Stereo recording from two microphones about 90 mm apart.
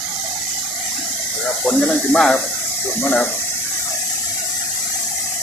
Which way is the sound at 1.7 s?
10° left (ahead or behind).